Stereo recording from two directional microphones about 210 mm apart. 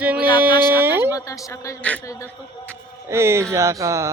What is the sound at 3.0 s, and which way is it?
Music, 10° right (ahead or behind).